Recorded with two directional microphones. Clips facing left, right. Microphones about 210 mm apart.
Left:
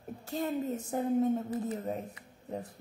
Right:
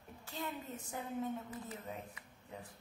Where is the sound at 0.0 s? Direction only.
40° left (ahead or behind).